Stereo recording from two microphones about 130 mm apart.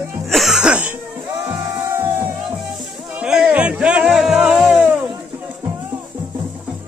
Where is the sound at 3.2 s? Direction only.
10° right (ahead or behind).